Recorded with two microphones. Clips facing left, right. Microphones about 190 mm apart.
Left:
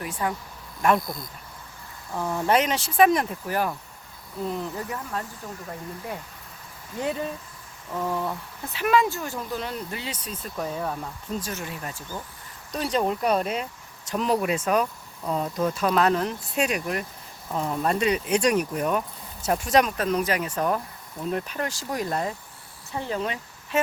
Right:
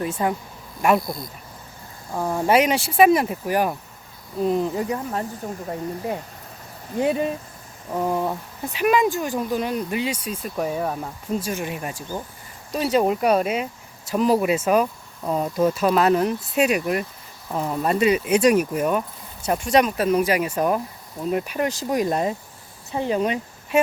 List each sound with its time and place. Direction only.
0.0 s speech: 25° right (ahead or behind)
0.8 s speech: 10° right (ahead or behind)
1.0 s speech: 25° right (ahead or behind)
7.0 s speech: 15° right (ahead or behind)